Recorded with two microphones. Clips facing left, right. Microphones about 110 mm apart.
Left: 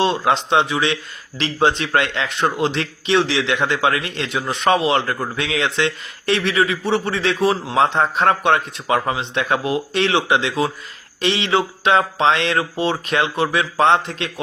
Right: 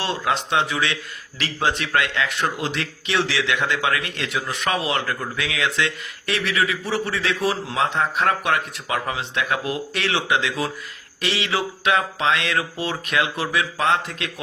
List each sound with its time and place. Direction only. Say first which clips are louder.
0.0 s a man's voice: left 6 dB; 25° left (ahead or behind)